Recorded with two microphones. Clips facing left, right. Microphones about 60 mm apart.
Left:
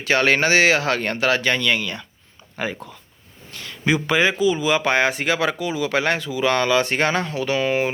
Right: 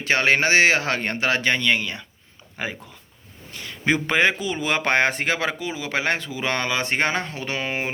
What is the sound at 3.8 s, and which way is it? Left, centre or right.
Speech, right.